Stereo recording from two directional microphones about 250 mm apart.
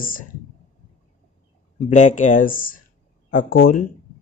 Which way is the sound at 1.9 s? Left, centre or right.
Left.